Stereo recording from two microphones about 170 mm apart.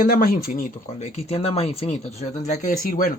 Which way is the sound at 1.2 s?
35° left (ahead or behind).